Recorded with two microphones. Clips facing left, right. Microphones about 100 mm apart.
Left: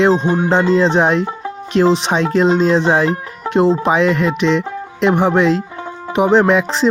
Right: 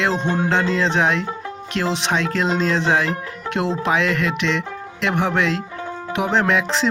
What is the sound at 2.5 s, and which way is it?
Music, 15° left (ahead or behind).